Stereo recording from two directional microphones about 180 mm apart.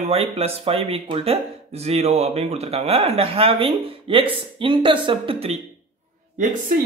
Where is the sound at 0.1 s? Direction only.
35° right (ahead or behind).